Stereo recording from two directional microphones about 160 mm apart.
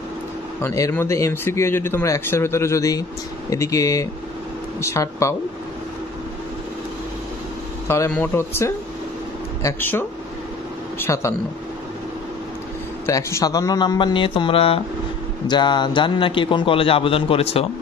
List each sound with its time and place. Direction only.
0.6 s speech: 20° left (ahead or behind)
8.1 s a man's voice: 15° left (ahead or behind)
13.0 s a man's voice: 20° left (ahead or behind); by 17.6 s 35° left (ahead or behind)